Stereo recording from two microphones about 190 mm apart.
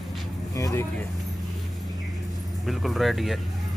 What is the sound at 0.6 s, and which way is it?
Speech, 15° left (ahead or behind).